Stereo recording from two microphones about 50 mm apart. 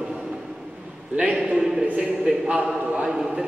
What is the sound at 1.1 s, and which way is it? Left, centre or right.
Speech, right.